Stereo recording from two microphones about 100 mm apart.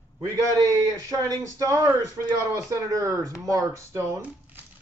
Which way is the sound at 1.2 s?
35° right (ahead or behind).